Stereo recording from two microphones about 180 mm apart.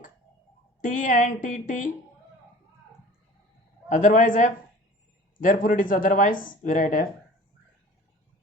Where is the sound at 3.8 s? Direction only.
45° left (ahead or behind).